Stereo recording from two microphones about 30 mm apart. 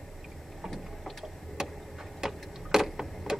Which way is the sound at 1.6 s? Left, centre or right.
Centre.